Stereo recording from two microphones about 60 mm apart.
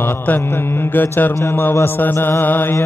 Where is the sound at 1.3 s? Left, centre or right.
Left.